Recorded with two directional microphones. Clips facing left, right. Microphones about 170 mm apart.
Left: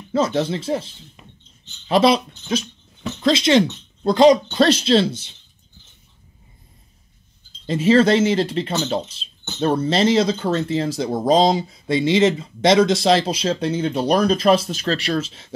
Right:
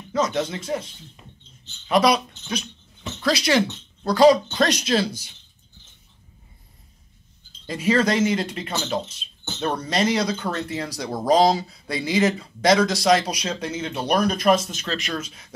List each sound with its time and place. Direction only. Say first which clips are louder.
0.1 s speech: left 4 dB; 30° left (ahead or behind)
1.2 s a sound: left 1 dB; 75° left (ahead or behind)
1.9 s speech: left 3 dB; 30° left (ahead or behind)
7.6 s speech: left 6 dB; 25° left (ahead or behind)